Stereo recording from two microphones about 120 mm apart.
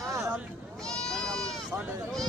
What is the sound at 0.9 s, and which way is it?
Goat, 5° left (ahead or behind).